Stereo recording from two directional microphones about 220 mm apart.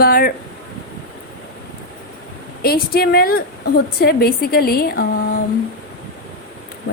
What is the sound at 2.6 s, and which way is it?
A woman's voice, 45° left (ahead or behind).